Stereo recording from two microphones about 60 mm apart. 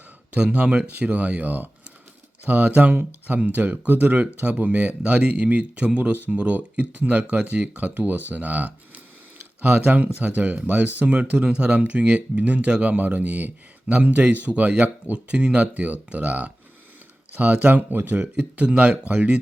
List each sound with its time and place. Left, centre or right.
0.3 s speech: right
9.8 s speech: right